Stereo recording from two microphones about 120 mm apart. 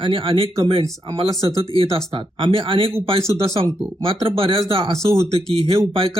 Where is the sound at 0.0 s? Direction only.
45° right (ahead or behind).